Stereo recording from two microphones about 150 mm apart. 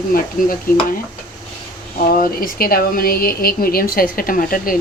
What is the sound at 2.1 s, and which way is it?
Speech, 75° left (ahead or behind).